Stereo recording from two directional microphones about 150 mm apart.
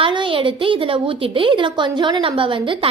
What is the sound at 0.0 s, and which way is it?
A woman's voice, 35° right (ahead or behind).